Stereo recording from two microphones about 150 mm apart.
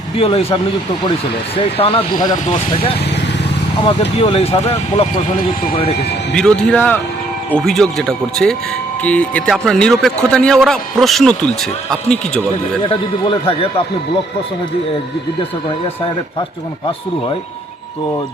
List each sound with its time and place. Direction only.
0.2 s speech: 35° left (ahead or behind)
3.8 s speech: 40° left (ahead or behind)
6.3 s speech: 5° left (ahead or behind)
12.8 s speech: 35° left (ahead or behind)